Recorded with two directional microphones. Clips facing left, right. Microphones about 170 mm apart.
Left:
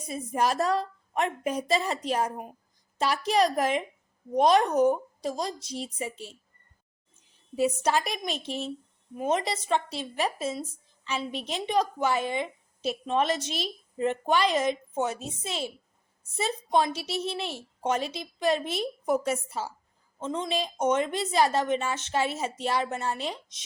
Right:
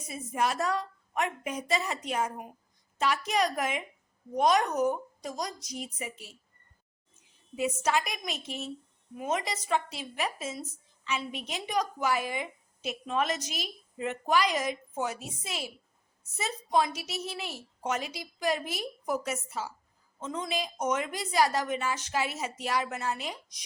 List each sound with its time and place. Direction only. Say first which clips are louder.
0.1 s a woman's voice: left 3 dB; 35° left (ahead or behind)
7.5 s a woman's voice: left 3 dB; 35° left (ahead or behind)